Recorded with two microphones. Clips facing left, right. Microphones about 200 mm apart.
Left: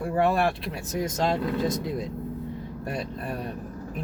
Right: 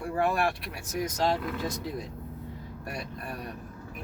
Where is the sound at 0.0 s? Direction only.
25° left (ahead or behind).